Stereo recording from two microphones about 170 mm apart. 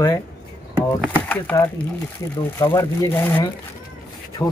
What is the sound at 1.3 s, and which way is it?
Speech, 10° left (ahead or behind).